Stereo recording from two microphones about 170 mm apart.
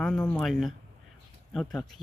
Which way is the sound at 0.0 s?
5° left (ahead or behind).